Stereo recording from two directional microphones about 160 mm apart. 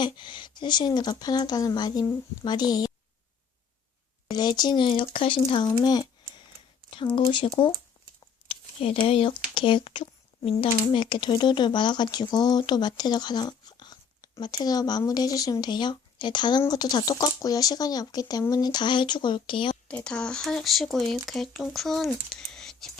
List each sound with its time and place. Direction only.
0.0 s speech: 30° left (ahead or behind)
4.4 s speech: 25° left (ahead or behind)
8.4 s a sound: 35° left (ahead or behind)
10.6 s speech: 30° left (ahead or behind)
19.9 s speech: 5° left (ahead or behind)